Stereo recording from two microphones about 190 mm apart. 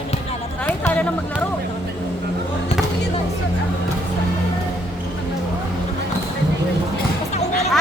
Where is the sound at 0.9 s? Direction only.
10° left (ahead or behind).